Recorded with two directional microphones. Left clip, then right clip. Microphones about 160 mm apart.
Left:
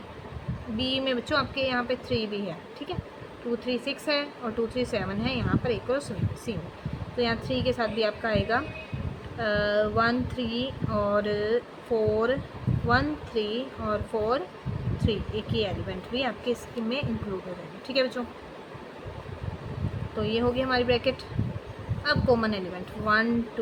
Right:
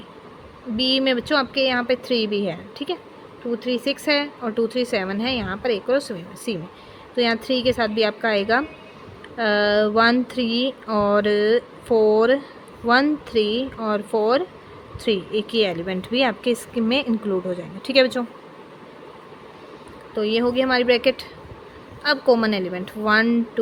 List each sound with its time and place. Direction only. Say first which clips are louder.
0.8 s a woman's voice: right 8 dB; 60° right (ahead or behind)
15.0 s speech: right 9 dB; 80° right
17.8 s speech: right 9 dB; 80° right
20.1 s a woman's voice: right 7 dB; 65° right (ahead or behind)